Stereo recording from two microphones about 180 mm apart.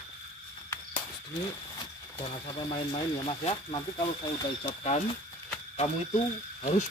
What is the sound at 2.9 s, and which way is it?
Speech, 30° left (ahead or behind).